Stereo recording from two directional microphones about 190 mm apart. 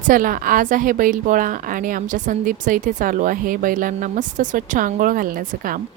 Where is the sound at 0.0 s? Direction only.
45° right (ahead or behind).